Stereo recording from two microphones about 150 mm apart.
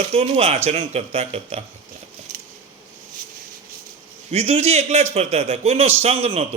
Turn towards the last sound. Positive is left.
turn(degrees=-40)  # may be behind; listen again after turning